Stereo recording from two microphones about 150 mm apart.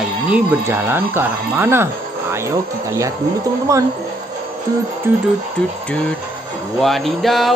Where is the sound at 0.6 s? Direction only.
15° right (ahead or behind).